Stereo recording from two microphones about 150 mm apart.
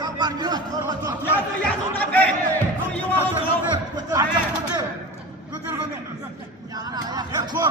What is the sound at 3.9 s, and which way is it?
Chatter, 25° right (ahead or behind).